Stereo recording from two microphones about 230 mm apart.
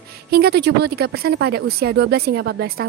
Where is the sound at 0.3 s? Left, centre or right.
Right.